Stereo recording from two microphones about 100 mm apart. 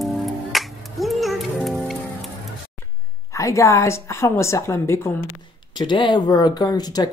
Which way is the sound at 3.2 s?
30° left (ahead or behind).